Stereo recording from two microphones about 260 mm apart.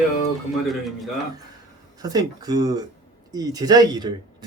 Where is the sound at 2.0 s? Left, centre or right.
Centre.